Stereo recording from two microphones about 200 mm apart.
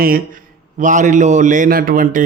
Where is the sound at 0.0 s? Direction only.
45° right (ahead or behind).